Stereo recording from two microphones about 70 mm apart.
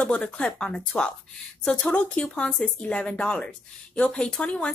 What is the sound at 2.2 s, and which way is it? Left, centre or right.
Speech, centre.